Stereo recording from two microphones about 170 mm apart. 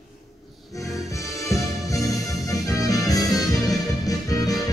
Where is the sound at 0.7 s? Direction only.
20° left (ahead or behind).